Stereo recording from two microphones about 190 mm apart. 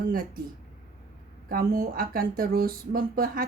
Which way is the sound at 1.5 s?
50° right (ahead or behind).